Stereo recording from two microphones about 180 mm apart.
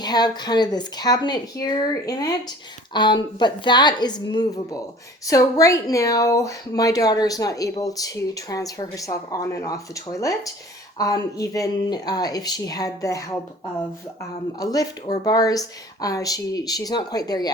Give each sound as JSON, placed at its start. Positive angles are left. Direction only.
{"t": 0.0, "sound": "speech", "side_deg": 25}
{"t": 14.6, "sound": "speech", "side_deg": 20}